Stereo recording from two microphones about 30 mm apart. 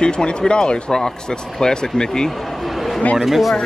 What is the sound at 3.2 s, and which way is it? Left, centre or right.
Speech, centre.